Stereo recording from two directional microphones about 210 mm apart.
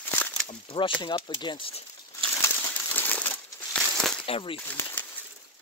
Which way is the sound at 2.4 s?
10° left (ahead or behind).